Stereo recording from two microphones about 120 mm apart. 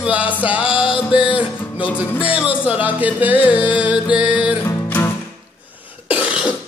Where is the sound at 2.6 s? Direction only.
10° right (ahead or behind).